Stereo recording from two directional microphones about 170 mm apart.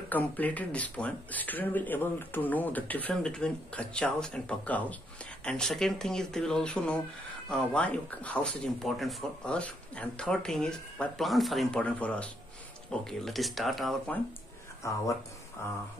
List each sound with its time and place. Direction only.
0.1 s speech: 10° left (ahead or behind)
14.8 s speech: 15° left (ahead or behind)